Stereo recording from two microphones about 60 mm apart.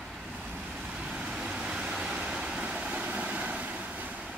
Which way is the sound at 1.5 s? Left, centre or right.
Centre.